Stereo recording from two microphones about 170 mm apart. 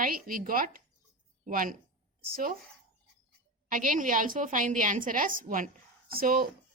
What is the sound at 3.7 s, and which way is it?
A woman's voice, 55° right (ahead or behind).